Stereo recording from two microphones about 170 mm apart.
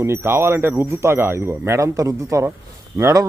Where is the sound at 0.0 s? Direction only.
15° right (ahead or behind).